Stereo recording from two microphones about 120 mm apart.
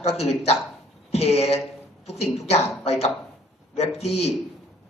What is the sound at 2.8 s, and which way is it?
A man's voice, 60° left (ahead or behind).